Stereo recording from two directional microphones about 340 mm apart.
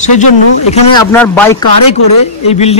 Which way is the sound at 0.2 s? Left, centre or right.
Centre.